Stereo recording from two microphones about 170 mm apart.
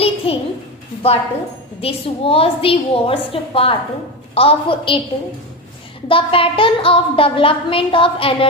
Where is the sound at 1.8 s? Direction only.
35° left (ahead or behind).